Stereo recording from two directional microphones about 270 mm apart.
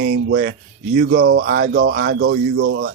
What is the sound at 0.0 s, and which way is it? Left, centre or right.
Speech, right.